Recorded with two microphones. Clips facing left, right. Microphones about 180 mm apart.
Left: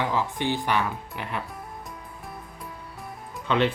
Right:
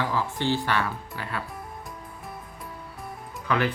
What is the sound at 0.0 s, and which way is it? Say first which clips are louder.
Speech: left 1 dB; 20° left (ahead or behind).